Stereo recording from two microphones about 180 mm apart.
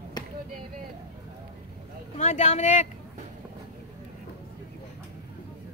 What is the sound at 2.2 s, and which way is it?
Speech, 35° left (ahead or behind).